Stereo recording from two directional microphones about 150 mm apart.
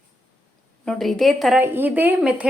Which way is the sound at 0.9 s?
5° left (ahead or behind).